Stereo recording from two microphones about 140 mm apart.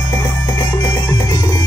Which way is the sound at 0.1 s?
20° left (ahead or behind).